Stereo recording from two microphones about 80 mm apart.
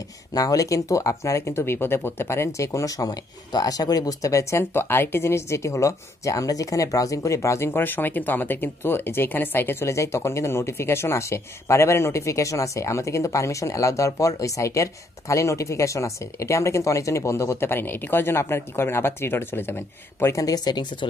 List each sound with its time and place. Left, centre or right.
0.3 s speech: left
3.1 s speech: left